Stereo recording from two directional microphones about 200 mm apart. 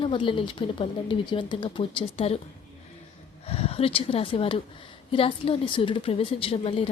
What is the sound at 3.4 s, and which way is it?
A woman's voice, 30° left (ahead or behind).